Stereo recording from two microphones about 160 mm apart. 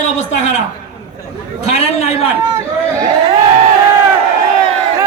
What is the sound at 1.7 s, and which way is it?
Speech, 40° left (ahead or behind).